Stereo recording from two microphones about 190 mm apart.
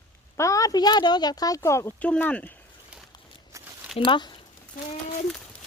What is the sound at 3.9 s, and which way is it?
Speech, 25° left (ahead or behind).